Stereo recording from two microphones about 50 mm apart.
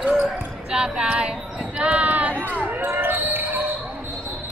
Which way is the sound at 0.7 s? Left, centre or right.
Centre.